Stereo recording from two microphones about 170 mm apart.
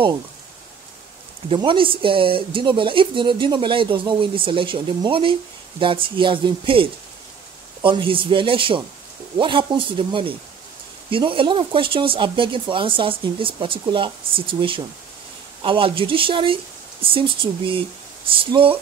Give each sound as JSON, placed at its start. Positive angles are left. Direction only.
{"t": 1.5, "sound": "speech", "side_deg": -30}